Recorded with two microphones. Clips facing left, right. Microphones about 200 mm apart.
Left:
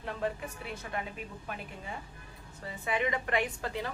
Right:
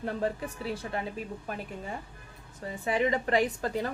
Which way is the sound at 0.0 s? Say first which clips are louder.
Right 4 dB; 40° right (ahead or behind).